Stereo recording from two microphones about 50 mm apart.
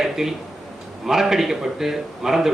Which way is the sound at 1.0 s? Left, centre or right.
Centre.